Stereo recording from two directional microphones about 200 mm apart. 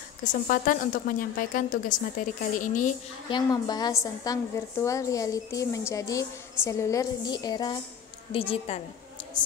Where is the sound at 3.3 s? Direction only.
20° left (ahead or behind).